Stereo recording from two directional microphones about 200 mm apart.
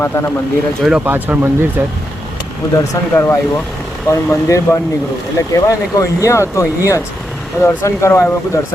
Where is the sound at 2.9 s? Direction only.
10° left (ahead or behind).